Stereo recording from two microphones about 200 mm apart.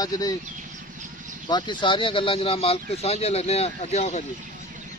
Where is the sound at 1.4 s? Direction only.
20° left (ahead or behind).